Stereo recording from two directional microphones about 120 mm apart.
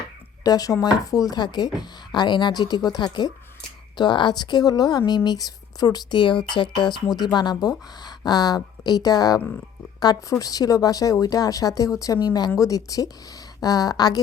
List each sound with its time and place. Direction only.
0.4 s speech: 30° left (ahead or behind)